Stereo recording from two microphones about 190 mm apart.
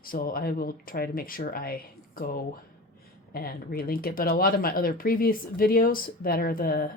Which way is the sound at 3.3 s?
50° left (ahead or behind).